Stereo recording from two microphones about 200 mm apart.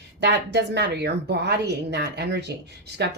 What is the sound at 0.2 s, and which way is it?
A woman's voice, 55° right (ahead or behind).